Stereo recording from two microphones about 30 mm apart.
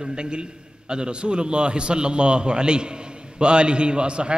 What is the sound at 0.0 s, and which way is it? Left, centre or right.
A man's voice, right.